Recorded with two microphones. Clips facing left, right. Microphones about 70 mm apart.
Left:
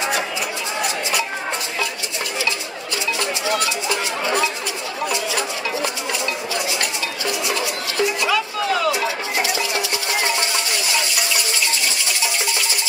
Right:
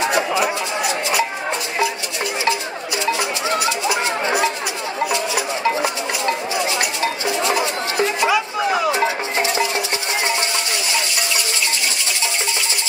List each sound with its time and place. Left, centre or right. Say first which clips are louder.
5.1 s a sound: right 2 dB; right
7.2 s music: right 2 dB; right
8.9 s music: right 3 dB; right